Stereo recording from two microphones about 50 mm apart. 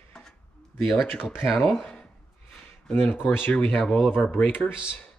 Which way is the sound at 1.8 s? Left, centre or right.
Left.